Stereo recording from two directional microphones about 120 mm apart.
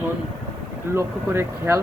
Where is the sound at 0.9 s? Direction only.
20° right (ahead or behind).